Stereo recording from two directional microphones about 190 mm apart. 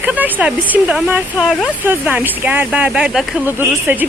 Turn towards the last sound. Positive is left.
turn(degrees=-10)  # may be behind; listen again after turning